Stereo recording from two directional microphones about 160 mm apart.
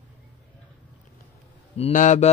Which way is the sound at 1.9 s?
50° left (ahead or behind).